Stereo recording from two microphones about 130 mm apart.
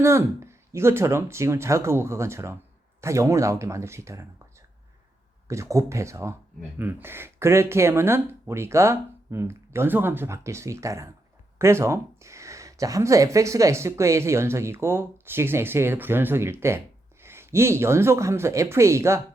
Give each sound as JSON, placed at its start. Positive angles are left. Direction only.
{"t": 0.0, "sound": "speech", "side_deg": -20}
{"t": 5.5, "sound": "speech", "side_deg": -25}